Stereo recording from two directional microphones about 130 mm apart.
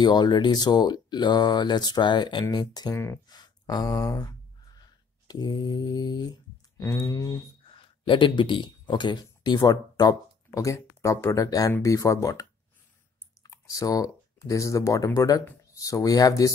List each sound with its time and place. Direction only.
0.0 s speech: 35° left (ahead or behind)
3.0 s a sound: 25° left (ahead or behind)
5.3 s speech: 30° left (ahead or behind)
7.7 s speech: 40° left (ahead or behind)